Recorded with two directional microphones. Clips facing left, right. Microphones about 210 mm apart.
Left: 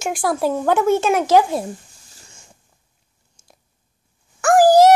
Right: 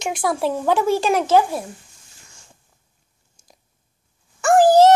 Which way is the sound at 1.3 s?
20° left (ahead or behind).